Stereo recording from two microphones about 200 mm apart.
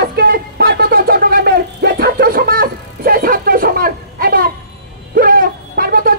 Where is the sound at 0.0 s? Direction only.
50° right (ahead or behind).